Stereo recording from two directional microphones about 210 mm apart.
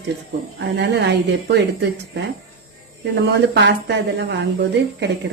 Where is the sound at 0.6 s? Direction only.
50° right (ahead or behind).